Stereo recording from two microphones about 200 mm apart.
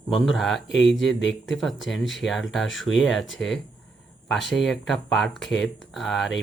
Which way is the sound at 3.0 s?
Centre (ahead or behind).